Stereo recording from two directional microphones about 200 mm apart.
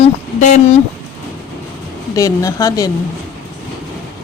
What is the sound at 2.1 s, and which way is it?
Speech, 15° left (ahead or behind).